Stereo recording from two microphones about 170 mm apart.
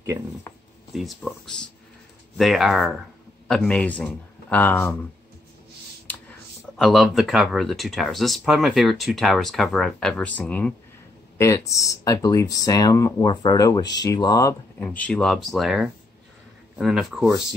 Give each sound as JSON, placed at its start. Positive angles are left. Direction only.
{"t": 0.9, "sound": "speech", "side_deg": 0}
{"t": 6.8, "sound": "speech", "side_deg": 0}
{"t": 14.8, "sound": "speech", "side_deg": 10}